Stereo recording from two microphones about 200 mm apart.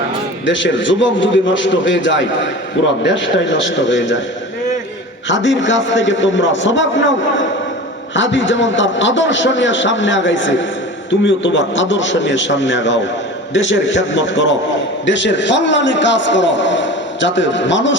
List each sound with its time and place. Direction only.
0.4 s a man's voice: 65° left (ahead or behind)
5.3 s a man's voice: 65° left (ahead or behind)